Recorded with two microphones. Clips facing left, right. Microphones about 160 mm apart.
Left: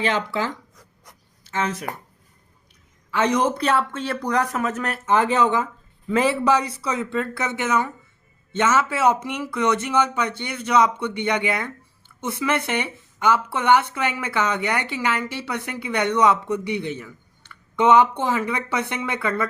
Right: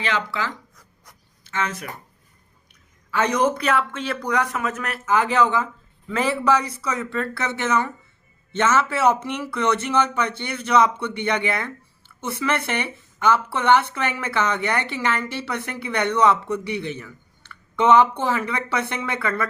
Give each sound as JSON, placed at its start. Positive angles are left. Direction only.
{"t": 0.3, "sound": "speech", "side_deg": 45}
{"t": 1.5, "sound": "speech", "side_deg": 35}
{"t": 3.1, "sound": "speech", "side_deg": 20}